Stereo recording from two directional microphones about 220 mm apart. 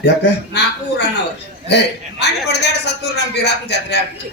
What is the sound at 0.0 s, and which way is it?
A man's voice, 50° left (ahead or behind).